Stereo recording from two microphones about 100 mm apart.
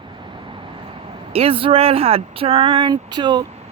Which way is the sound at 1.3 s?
70° right (ahead or behind).